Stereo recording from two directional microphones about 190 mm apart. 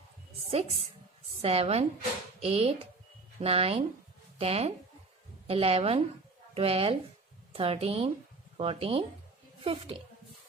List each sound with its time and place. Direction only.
0.5 s a woman's voice: 35° right (ahead or behind)